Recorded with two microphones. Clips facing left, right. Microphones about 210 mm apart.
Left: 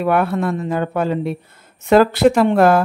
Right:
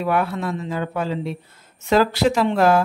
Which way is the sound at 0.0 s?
55° left (ahead or behind).